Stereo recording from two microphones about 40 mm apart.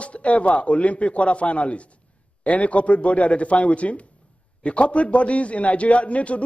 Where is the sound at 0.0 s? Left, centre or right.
Left.